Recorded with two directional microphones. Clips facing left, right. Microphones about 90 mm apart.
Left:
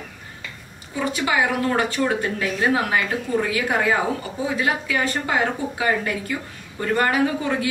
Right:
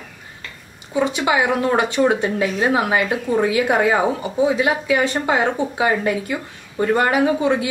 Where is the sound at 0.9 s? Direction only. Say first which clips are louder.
Right 4 dB; 20° right (ahead or behind).